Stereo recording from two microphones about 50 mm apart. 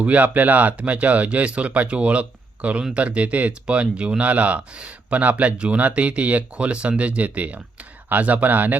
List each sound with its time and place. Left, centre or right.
0.0 s speech: right